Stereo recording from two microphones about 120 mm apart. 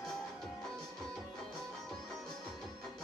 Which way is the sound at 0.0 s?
5° left (ahead or behind).